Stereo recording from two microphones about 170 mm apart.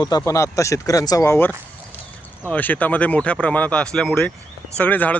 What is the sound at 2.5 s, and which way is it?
Speech, 10° left (ahead or behind).